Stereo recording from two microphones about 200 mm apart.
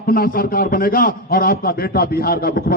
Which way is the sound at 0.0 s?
45° left (ahead or behind).